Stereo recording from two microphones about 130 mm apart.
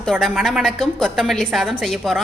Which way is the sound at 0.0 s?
Centre (ahead or behind).